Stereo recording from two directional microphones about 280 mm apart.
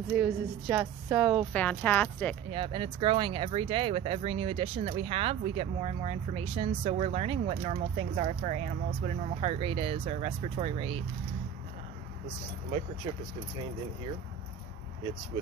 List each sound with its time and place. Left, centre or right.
0.1 s a woman's voice: centre
2.5 s speech: centre